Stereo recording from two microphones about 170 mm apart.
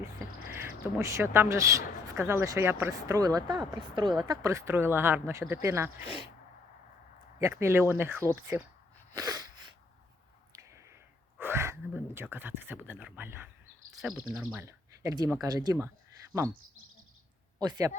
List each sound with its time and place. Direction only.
0.0 s speech: 15° right (ahead or behind)
7.3 s speech: 15° right (ahead or behind)
9.1 s sneeze: 20° right (ahead or behind)
10.5 s a sound: 20° right (ahead or behind)
11.3 s speech: 15° right (ahead or behind)
13.9 s speech: centre (ahead or behind)
14.5 s speech: 15° right (ahead or behind)
17.6 s speech: 20° right (ahead or behind)